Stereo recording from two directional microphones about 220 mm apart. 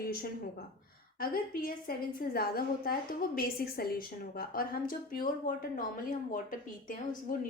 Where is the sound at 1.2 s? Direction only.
40° left (ahead or behind).